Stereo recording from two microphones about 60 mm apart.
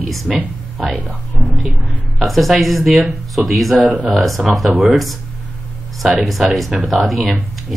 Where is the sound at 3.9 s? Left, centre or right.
Right.